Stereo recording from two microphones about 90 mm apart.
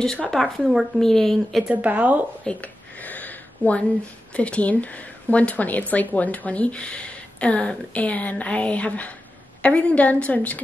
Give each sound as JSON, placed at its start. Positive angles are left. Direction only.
{"t": 0.0, "sound": "speech", "side_deg": 5}
{"t": 1.7, "sound": "speech", "side_deg": -15}
{"t": 2.4, "sound": "a sound", "side_deg": 15}
{"t": 4.4, "sound": "speech", "side_deg": 15}